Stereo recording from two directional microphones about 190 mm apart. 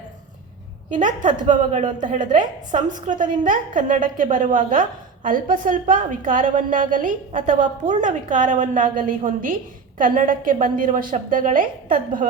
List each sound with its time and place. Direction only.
0.9 s a woman's voice: 40° right (ahead or behind)